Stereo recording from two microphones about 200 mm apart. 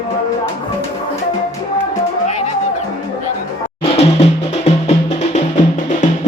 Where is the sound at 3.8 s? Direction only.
30° left (ahead or behind).